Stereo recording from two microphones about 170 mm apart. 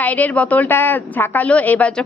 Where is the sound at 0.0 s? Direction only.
10° left (ahead or behind).